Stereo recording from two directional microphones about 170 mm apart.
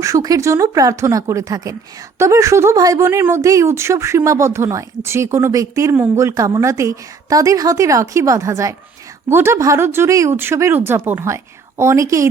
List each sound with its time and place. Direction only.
0.0 s speech: 20° right (ahead or behind)